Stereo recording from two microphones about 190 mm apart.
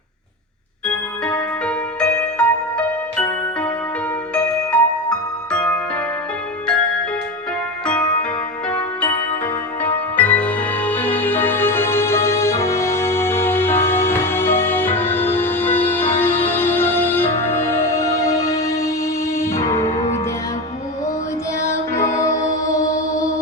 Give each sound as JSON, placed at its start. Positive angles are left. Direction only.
{"t": 1.2, "sound": "music", "side_deg": 5}
{"t": 7.9, "sound": "music", "side_deg": 5}
{"t": 21.7, "sound": "music", "side_deg": 15}